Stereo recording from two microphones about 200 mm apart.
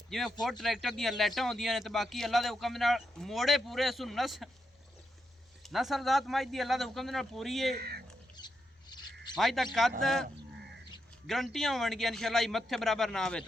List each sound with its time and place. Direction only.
0.1 s a man's voice: centre (ahead or behind)
5.6 s a man's voice: centre (ahead or behind)
7.8 s a sound: 50° right (ahead or behind)
8.4 s a sound: 20° left (ahead or behind)
9.4 s a man's voice: centre (ahead or behind)
11.3 s a man's voice: centre (ahead or behind)